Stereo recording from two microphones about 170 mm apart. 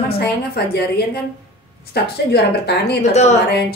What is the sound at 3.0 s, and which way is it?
Speech, 40° left (ahead or behind).